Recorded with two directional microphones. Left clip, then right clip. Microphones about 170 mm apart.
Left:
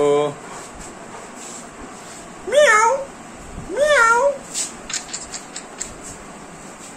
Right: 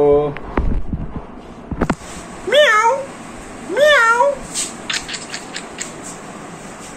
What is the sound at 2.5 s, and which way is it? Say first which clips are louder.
Cat: right 2 dB; 10° left (ahead or behind).